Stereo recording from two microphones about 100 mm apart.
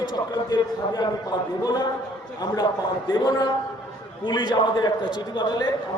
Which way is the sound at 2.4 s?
40° left (ahead or behind).